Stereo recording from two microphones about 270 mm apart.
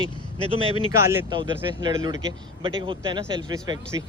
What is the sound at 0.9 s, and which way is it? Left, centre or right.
Speech, centre.